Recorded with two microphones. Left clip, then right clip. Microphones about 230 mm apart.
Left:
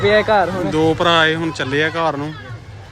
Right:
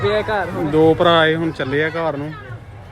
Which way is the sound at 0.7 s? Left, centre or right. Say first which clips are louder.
Right 3 dB; centre.